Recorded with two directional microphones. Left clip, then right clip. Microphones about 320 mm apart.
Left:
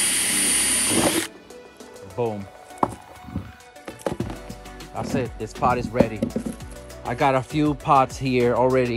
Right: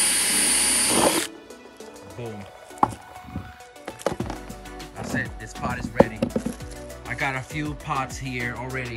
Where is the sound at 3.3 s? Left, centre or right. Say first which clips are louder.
Left 1 dB; centre.